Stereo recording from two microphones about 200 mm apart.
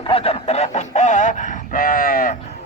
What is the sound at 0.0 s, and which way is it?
Speech, 30° left (ahead or behind).